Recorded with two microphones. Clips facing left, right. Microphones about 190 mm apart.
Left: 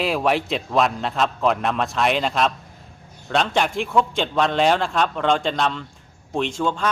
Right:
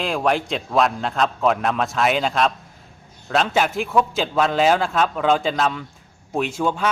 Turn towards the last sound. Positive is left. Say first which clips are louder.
# right 1 dB
turn(degrees=-10)  # may be behind; listen again after turning